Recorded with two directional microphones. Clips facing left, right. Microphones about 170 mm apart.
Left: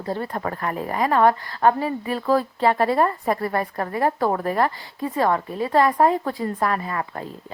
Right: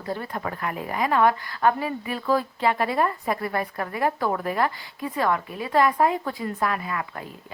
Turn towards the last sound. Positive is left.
turn(degrees=35)  # may be behind; listen again after turning